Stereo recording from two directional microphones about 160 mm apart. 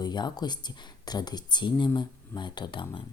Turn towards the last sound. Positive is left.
turn(degrees=30)  # may be behind; listen again after turning